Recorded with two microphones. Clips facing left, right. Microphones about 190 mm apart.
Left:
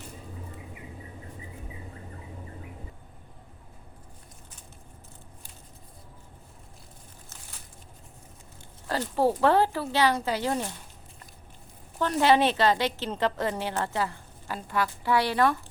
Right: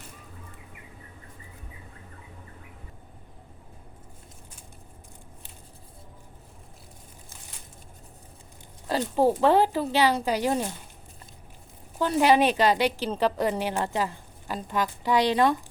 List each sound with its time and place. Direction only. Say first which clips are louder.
8.9 s a woman's voice: right 2 dB; 15° right (ahead or behind)
11.9 s a woman's voice: right 1 dB; 10° right (ahead or behind)